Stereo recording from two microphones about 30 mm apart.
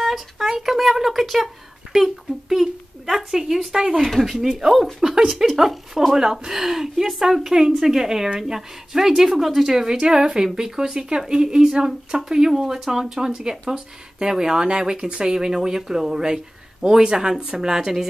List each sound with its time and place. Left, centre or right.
0.0 s speech: centre
5.5 s speech: centre
7.4 s speech: right
9.8 s speech: right
14.6 s speech: right
15.3 s speech: right